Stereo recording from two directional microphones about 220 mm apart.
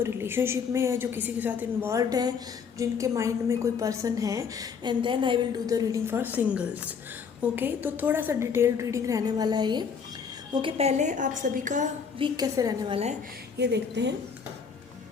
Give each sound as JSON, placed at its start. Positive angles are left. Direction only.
{"t": 0.0, "sound": "a woman's voice", "side_deg": -10}
{"t": 12.2, "sound": "a woman's voice", "side_deg": -15}
{"t": 13.6, "sound": "a woman's voice", "side_deg": -50}